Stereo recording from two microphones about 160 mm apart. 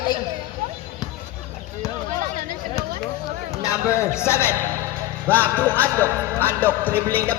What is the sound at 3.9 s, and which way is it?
Music, 15° left (ahead or behind).